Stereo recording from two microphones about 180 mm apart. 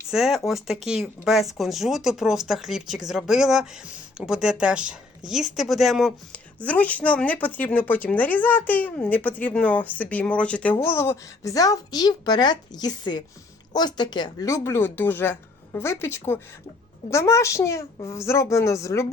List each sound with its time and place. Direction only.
0.1 s a woman's voice: centre (ahead or behind); by 19.0 s 15° left (ahead or behind)